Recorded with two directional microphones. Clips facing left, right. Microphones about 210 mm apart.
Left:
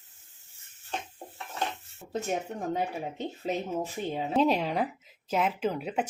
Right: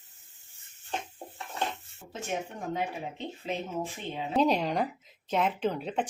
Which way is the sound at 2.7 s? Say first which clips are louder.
Even; 40° left (ahead or behind).